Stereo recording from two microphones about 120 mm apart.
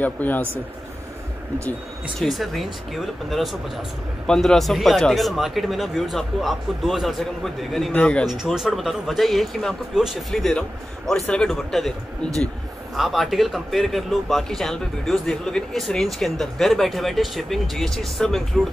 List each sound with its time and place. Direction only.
0.0 s speech: 15° left (ahead or behind)
2.1 s speech: centre (ahead or behind)
8.3 s speech: 5° right (ahead or behind)
12.9 s speech: centre (ahead or behind)